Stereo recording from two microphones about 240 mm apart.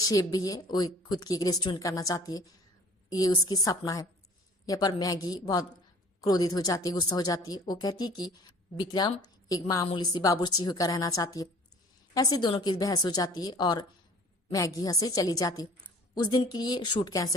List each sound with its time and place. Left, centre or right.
0.0 s a woman's voice: centre